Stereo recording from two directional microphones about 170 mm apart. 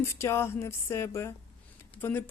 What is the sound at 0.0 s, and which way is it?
Speech, 15° left (ahead or behind).